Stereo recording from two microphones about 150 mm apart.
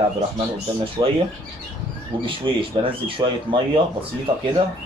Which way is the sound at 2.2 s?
35° right (ahead or behind).